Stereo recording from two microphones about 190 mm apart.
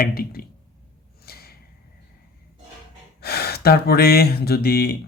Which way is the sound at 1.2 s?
55° left (ahead or behind).